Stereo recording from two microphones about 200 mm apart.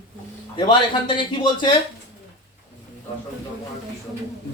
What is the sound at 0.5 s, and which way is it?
Speech, 25° left (ahead or behind).